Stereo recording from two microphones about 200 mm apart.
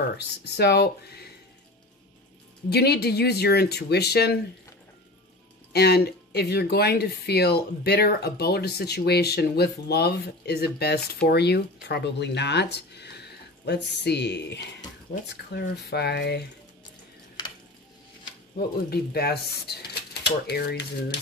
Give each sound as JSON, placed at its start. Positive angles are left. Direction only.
{"t": 0.6, "sound": "speech", "side_deg": 55}
{"t": 2.7, "sound": "speech", "side_deg": 55}
{"t": 5.7, "sound": "speech", "side_deg": 55}
{"t": 18.6, "sound": "speech", "side_deg": 50}